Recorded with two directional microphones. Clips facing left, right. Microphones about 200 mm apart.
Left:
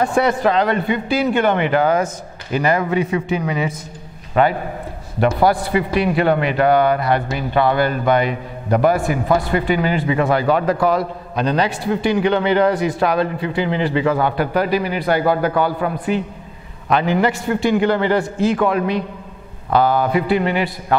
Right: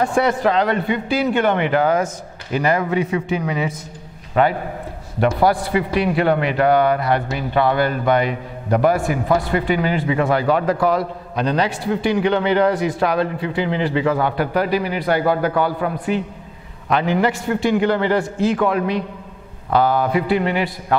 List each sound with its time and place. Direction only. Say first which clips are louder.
0.0 s a man's voice: left 1 dB; 20° left (ahead or behind)